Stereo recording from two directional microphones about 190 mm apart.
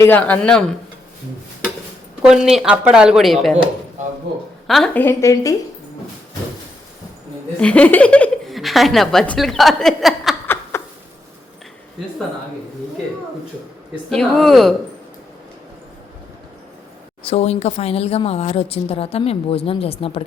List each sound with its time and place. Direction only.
0.0 s a man's voice: 10° left (ahead or behind)
2.2 s speech: 5° right (ahead or behind)
4.6 s a woman's voice: centre (ahead or behind)
5.0 s a man's voice: 15° left (ahead or behind)
7.6 s speech: 5° left (ahead or behind)
10.4 s snicker: 10° left (ahead or behind)
14.1 s speech: 5° left (ahead or behind)
17.2 s speech: 35° left (ahead or behind)